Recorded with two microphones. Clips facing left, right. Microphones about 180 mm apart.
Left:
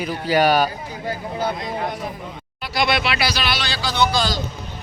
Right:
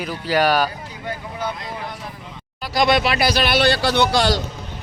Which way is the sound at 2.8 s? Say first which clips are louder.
Right 3 dB; 40° right (ahead or behind).